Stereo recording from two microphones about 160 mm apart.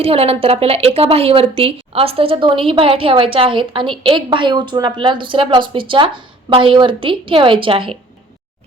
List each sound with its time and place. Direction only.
0.0 s a woman's voice: 40° right (ahead or behind)